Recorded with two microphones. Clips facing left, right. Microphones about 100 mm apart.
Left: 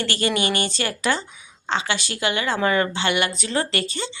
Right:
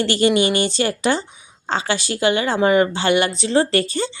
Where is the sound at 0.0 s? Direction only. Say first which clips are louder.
Right 7 dB; 30° right (ahead or behind).